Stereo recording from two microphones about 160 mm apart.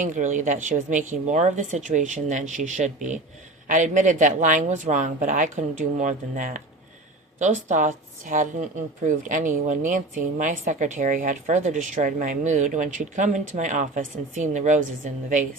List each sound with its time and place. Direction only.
0.0 s a woman's voice: 50° right (ahead or behind)